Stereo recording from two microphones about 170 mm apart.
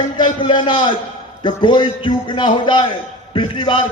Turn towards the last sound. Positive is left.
turn(degrees=30)  # may be behind; listen again after turning